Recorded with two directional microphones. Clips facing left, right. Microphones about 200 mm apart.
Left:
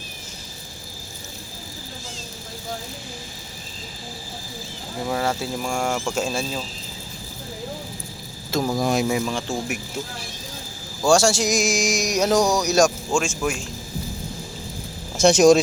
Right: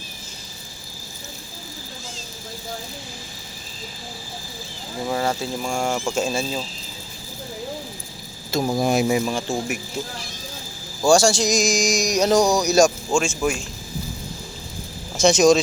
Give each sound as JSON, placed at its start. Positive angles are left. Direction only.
{"t": 5.0, "sound": "speech", "side_deg": -5}
{"t": 8.6, "sound": "speech", "side_deg": -25}
{"t": 8.9, "sound": "speech", "side_deg": -5}
{"t": 11.0, "sound": "speech", "side_deg": 5}
{"t": 15.2, "sound": "speech", "side_deg": 10}